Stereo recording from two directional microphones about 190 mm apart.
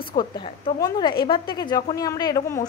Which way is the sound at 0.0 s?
25° left (ahead or behind).